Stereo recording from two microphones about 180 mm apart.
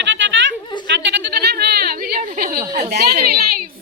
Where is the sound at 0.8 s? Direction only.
80° right; by 2.6 s 50° right (ahead or behind).